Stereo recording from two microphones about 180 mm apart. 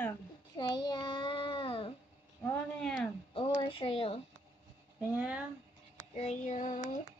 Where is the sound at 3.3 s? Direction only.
30° left (ahead or behind).